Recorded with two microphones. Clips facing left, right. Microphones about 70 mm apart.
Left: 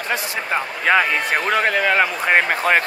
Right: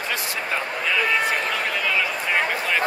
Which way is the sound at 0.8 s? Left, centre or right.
Left.